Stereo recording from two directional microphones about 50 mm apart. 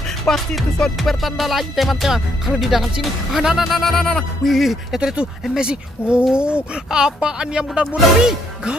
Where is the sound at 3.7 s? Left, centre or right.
Centre.